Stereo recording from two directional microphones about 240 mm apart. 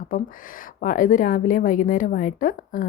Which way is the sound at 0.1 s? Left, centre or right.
Left.